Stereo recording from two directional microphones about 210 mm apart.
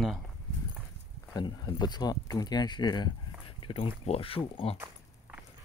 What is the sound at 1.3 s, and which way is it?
Speech, 20° left (ahead or behind).